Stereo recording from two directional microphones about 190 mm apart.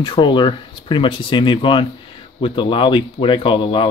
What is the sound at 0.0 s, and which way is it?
Speech, 25° left (ahead or behind).